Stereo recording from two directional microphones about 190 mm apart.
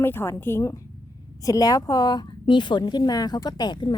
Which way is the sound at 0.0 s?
10° left (ahead or behind).